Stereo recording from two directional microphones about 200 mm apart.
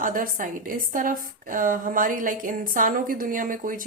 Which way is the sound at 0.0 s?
45° right (ahead or behind).